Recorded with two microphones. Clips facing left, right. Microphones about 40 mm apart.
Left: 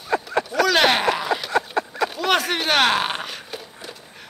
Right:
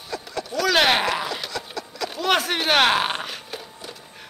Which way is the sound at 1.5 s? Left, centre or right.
Left.